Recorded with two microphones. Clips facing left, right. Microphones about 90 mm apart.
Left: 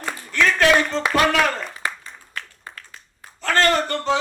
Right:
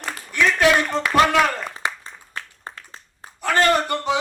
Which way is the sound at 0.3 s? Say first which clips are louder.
Even; 15° right (ahead or behind).